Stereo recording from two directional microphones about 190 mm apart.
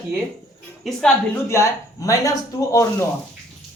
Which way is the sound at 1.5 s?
15° left (ahead or behind).